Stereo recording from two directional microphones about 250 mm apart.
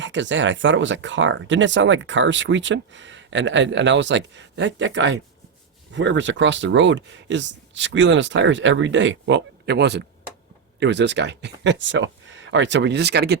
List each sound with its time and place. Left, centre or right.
0.0 s speech: right